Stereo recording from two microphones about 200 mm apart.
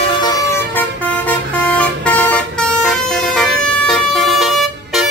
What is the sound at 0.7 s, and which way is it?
Vehicle, 10° left (ahead or behind).